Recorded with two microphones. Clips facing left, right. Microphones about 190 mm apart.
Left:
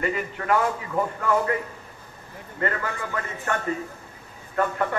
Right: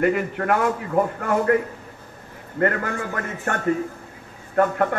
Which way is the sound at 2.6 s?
55° right (ahead or behind).